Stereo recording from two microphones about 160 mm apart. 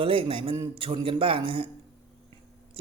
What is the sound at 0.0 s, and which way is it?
Speech, 35° right (ahead or behind).